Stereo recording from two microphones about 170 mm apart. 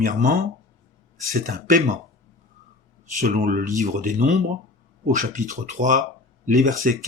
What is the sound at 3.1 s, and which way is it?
Speech, 50° right (ahead or behind).